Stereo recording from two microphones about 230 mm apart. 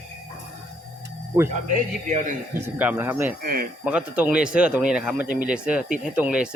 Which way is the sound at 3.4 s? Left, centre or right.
Right.